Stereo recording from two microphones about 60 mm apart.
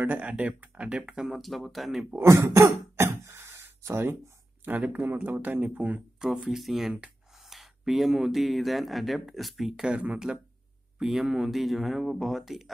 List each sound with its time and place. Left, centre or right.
0.0 s speech: right
1.2 s speech: centre
2.2 s throat clearing: right
4.6 s speech: right
6.1 s speech: centre
9.8 s speech: right
11.0 s speech: centre